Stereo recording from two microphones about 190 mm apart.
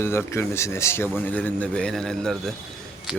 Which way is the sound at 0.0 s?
15° left (ahead or behind).